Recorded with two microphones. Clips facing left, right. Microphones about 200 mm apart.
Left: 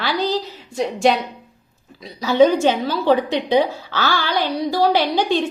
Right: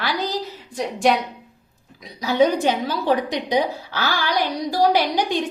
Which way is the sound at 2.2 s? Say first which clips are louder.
Left 4 dB; 15° right (ahead or behind).